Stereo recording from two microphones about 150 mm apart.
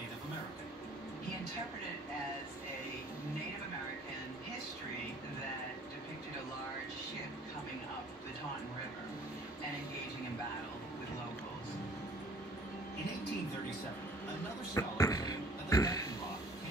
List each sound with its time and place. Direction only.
14.7 s beatboxing: 20° left (ahead or behind)